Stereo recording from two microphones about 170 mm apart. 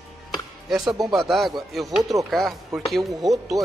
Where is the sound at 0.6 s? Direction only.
Centre (ahead or behind).